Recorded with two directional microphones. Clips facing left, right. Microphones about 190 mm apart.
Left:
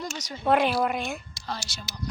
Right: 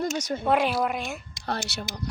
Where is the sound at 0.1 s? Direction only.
50° right (ahead or behind).